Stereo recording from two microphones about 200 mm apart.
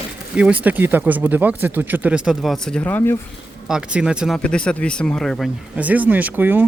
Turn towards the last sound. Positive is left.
turn(degrees=-10)  # may be behind; listen again after turning